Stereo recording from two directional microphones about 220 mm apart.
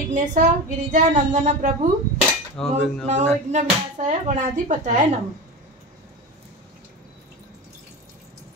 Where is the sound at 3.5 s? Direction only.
35° right (ahead or behind).